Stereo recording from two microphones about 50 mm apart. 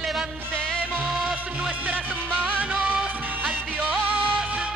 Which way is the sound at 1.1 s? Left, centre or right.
Right.